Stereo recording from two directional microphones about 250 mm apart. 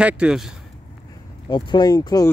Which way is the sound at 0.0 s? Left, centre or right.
Centre.